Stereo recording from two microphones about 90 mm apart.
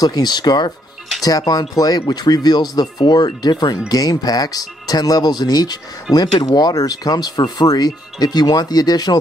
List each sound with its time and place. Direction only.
0.0 s speech: 50° left (ahead or behind)